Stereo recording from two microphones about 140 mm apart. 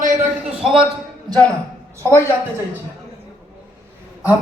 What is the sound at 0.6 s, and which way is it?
Speech, 5° right (ahead or behind).